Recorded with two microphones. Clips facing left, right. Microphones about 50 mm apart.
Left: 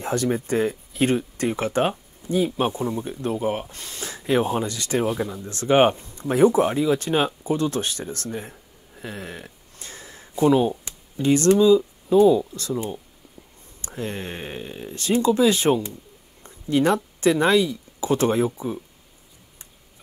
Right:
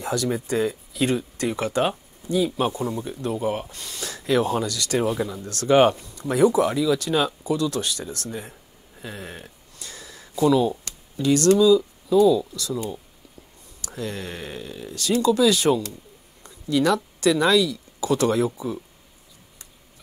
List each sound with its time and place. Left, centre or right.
0.0 s speech: left
2.7 s speech: left
3.0 s speech: left
9.8 s a sound: left
10.7 s a sound: centre
11.2 s speech: left